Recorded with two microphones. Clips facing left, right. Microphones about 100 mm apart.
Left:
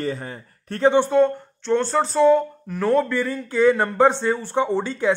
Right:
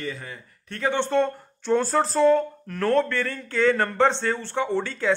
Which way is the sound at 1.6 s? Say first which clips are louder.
Left 1 dB; 5° right (ahead or behind).